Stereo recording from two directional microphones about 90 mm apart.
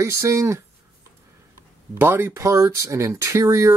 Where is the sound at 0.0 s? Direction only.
35° right (ahead or behind).